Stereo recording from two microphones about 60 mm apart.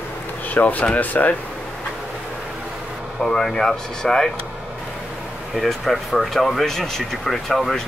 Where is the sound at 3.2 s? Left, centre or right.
Centre.